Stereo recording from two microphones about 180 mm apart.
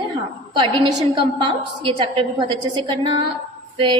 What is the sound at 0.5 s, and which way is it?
A woman's voice, 30° right (ahead or behind).